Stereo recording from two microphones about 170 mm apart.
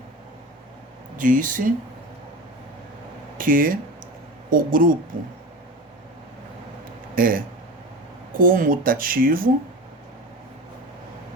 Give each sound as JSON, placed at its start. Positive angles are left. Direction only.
{"t": 1.1, "sound": "speech", "side_deg": -50}
{"t": 3.3, "sound": "speech", "side_deg": -55}
{"t": 7.2, "sound": "speech", "side_deg": -55}